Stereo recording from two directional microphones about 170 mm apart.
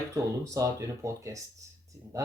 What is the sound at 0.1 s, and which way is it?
Speech, 20° right (ahead or behind).